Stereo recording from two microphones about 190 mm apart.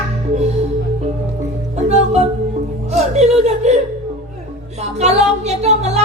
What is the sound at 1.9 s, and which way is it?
Music, 35° right (ahead or behind).